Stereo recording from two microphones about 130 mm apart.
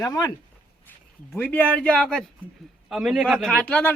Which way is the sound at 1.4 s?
15° left (ahead or behind).